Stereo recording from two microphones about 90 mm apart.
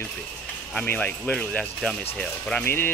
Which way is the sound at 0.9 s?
20° left (ahead or behind).